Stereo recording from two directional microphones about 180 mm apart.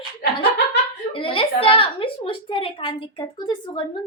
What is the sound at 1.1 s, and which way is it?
A woman's voice, 30° left (ahead or behind).